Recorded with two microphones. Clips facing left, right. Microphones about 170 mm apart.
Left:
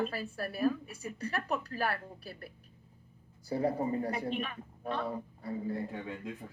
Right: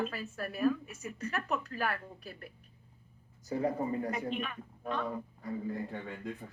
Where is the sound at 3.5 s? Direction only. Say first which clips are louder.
Left 1 dB; 35° left (ahead or behind).